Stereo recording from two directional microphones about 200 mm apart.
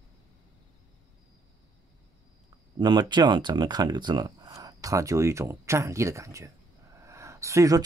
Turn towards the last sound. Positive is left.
turn(degrees=-15)  # may be behind; listen again after turning